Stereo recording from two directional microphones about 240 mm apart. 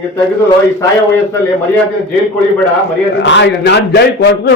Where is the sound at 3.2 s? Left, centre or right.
Left.